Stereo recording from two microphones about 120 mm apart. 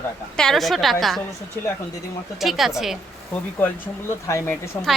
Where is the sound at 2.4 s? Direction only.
Centre (ahead or behind).